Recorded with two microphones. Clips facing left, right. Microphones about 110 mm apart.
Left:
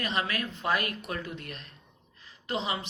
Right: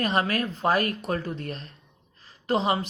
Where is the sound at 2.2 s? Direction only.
40° right (ahead or behind).